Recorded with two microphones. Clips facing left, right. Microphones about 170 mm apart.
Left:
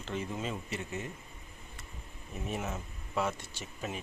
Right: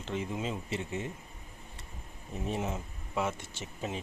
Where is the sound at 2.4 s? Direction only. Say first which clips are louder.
Right 3 dB; 30° right (ahead or behind).